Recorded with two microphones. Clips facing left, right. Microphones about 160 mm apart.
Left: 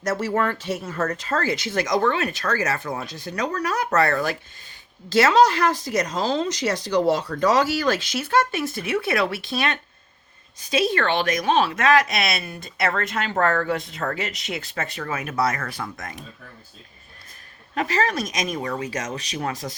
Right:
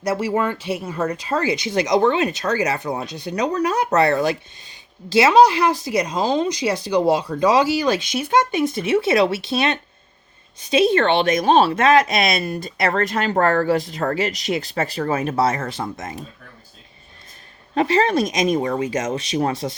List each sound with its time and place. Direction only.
0.0 s speech: 10° right (ahead or behind)
17.7 s speech: 25° right (ahead or behind)